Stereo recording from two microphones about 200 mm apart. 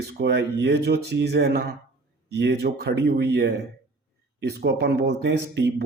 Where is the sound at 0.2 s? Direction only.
55° right (ahead or behind).